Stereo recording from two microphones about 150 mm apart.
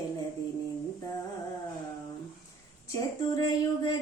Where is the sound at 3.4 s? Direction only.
25° left (ahead or behind).